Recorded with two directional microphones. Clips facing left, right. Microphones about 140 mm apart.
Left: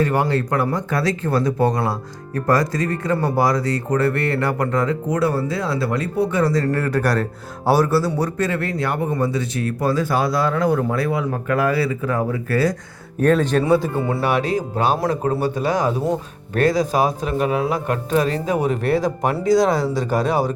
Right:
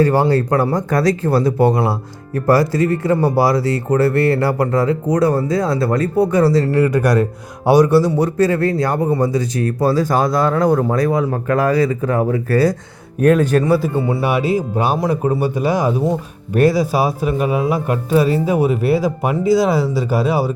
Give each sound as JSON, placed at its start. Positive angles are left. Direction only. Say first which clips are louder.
{"t": 0.0, "sound": "speech", "louder": "right 5 dB", "side_deg": -35}
{"t": 6.7, "sound": "speech", "louder": "right 5 dB", "side_deg": -10}
{"t": 8.4, "sound": "speech", "louder": "right 7 dB", "side_deg": -35}
{"t": 13.2, "sound": "speech", "louder": "right 3 dB", "side_deg": -10}